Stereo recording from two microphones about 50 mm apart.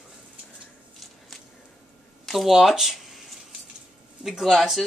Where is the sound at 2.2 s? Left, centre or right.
Centre.